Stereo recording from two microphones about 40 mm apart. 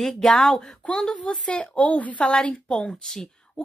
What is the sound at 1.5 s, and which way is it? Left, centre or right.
Speech, left.